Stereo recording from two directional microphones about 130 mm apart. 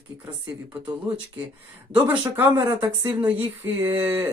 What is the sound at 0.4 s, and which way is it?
Speech, 10° right (ahead or behind).